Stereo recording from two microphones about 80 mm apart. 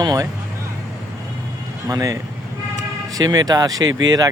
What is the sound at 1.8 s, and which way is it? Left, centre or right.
Speech, right.